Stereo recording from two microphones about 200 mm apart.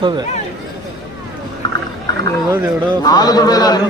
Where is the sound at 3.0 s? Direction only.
20° left (ahead or behind).